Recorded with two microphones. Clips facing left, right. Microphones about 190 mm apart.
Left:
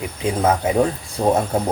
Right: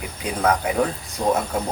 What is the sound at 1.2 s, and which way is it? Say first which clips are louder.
Speech: left 3 dB; 35° left (ahead or behind).